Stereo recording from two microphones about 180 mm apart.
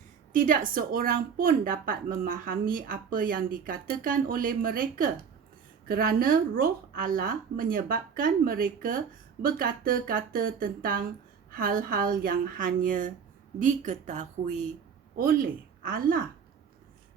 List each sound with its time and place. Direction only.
0.3 s a woman's voice: 50° right (ahead or behind)
15.1 s speech: 55° right (ahead or behind)